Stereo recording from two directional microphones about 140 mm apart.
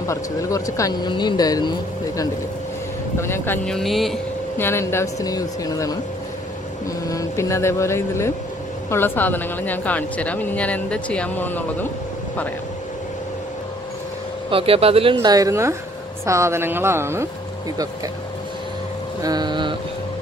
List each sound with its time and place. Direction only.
0.0 s speech: 20° left (ahead or behind)
3.2 s speech: 20° left (ahead or behind)
3.6 s speech: centre (ahead or behind)
4.6 s speech: 15° left (ahead or behind)
7.1 s speech: 20° left (ahead or behind)
14.5 s speech: 40° right (ahead or behind)
15.2 s a woman's voice: 25° right (ahead or behind)
19.2 s speech: 30° right (ahead or behind)